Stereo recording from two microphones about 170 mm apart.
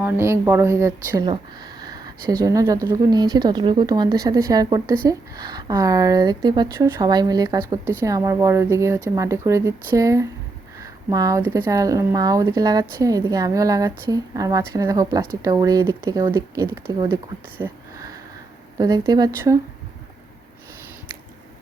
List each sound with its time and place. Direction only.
0.0 s speech: 15° right (ahead or behind)
18.8 s speech: 20° right (ahead or behind)